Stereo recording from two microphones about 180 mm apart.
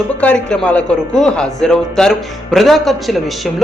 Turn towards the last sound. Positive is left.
turn(degrees=0)  # may be behind; listen again after turning